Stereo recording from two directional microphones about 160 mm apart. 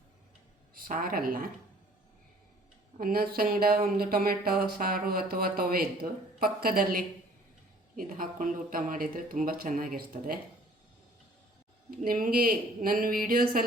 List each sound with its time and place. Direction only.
0.7 s a woman's voice: 60° right (ahead or behind)
3.0 s speech: 70° right (ahead or behind)
7.9 s speech: 60° right (ahead or behind)
11.9 s speech: 60° right (ahead or behind)